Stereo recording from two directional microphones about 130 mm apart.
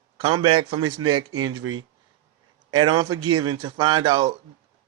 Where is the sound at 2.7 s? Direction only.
35° right (ahead or behind).